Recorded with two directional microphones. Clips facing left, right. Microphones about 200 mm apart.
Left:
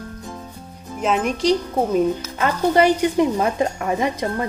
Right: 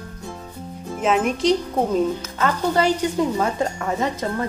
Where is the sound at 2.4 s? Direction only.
15° left (ahead or behind).